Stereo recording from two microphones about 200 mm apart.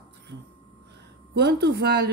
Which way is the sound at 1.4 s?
55° right (ahead or behind).